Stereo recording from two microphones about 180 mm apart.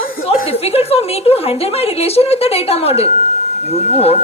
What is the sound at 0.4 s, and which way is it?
A woman's voice, 35° left (ahead or behind).